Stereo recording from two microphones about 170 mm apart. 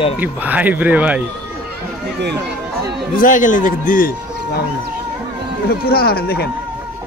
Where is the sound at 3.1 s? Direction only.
50° left (ahead or behind).